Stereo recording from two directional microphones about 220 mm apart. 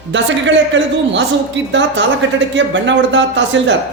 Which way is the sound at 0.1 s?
55° right (ahead or behind).